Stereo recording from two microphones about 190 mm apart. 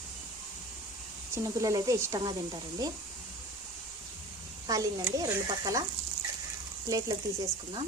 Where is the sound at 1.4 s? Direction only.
15° right (ahead or behind).